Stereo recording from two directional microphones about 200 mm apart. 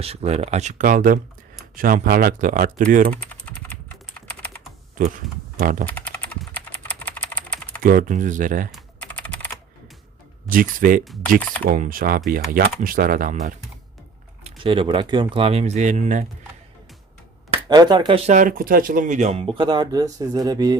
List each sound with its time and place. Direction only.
0.0 s speech: 30° right (ahead or behind)
3.1 s typing: 5° left (ahead or behind)
4.3 s computer keyboard: 5° left (ahead or behind)
4.9 s speech: 40° right (ahead or behind)
5.8 s typing: 5° left (ahead or behind)
7.8 s speech: 45° right (ahead or behind)
8.7 s typing: 5° left (ahead or behind)
10.4 s speech: 45° right (ahead or behind)
14.4 s speech: 25° right (ahead or behind)
17.7 s speech: 20° right (ahead or behind)
18.3 s speech: 40° right (ahead or behind); by 20.7 s 20° right (ahead or behind)